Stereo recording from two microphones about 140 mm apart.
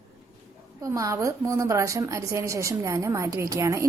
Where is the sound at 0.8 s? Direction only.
25° right (ahead or behind).